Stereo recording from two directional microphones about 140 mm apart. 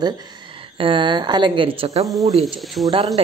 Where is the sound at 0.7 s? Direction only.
40° right (ahead or behind).